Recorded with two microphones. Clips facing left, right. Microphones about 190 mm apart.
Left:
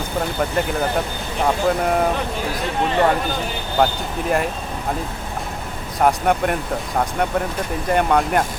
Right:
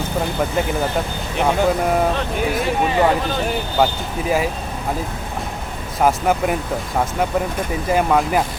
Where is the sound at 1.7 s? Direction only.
Centre (ahead or behind).